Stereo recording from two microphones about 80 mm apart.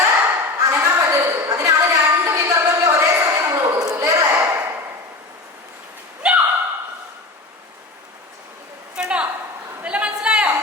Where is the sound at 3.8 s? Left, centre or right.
Right.